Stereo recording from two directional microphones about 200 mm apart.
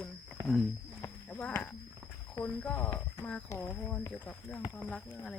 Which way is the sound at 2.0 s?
5° right (ahead or behind).